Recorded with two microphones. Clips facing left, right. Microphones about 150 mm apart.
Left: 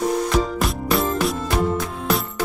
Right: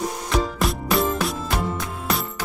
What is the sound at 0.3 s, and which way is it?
Music, centre (ahead or behind).